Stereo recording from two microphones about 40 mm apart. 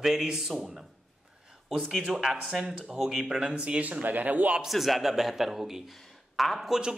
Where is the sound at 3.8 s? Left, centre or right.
Right.